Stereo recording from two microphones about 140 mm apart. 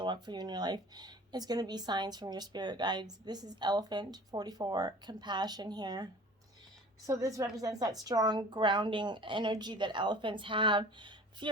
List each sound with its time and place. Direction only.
0.0 s speech: 35° right (ahead or behind)
7.1 s speech: 25° right (ahead or behind)